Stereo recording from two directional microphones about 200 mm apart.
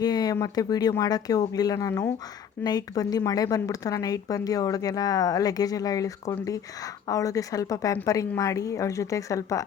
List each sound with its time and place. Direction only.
0.0 s speech: 20° left (ahead or behind)